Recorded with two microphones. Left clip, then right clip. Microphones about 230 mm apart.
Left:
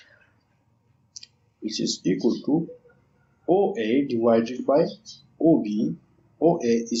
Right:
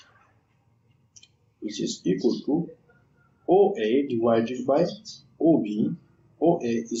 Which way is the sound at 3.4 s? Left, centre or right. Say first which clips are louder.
Right 2 dB; left.